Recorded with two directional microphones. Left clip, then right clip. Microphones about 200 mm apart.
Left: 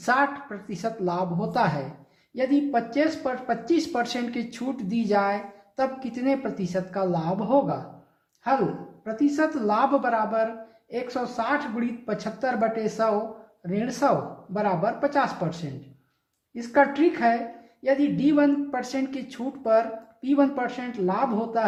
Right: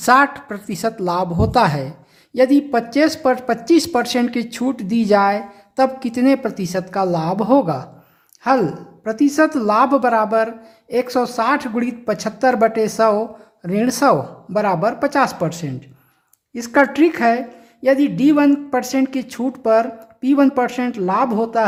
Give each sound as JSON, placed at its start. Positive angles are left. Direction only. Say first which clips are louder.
{"t": 0.0, "sound": "speech", "louder": "right 10 dB", "side_deg": -50}
{"t": 9.0, "sound": "speech", "louder": "right 8 dB", "side_deg": -50}
{"t": 16.6, "sound": "speech", "louder": "right 6 dB", "side_deg": -50}